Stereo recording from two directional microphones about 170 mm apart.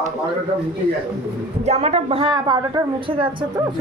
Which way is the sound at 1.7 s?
40° right (ahead or behind).